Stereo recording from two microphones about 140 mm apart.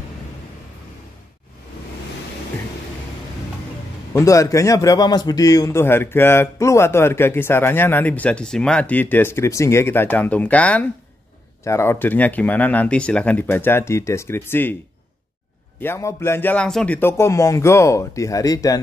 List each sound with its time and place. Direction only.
4.1 s a man's voice: 20° left (ahead or behind)
15.8 s a man's voice: 20° left (ahead or behind)